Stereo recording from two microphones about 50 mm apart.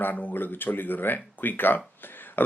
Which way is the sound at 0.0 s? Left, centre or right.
Left.